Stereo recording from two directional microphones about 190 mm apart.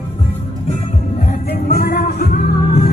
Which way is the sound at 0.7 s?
40° left (ahead or behind).